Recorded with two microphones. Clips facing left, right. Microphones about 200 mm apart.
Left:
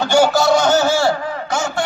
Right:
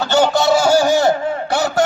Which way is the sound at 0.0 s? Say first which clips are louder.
Left 1 dB; 10° left (ahead or behind).